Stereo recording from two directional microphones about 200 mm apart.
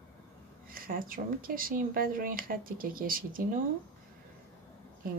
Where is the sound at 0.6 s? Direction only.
45° right (ahead or behind).